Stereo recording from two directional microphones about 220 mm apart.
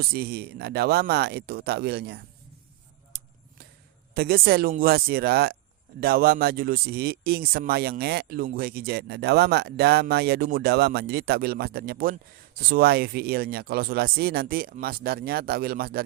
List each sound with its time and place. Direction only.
0.0 s speech: 45° right (ahead or behind)
4.1 s speech: 45° right (ahead or behind)